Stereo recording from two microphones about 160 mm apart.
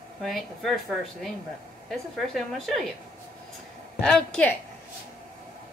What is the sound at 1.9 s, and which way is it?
A woman's voice, centre (ahead or behind).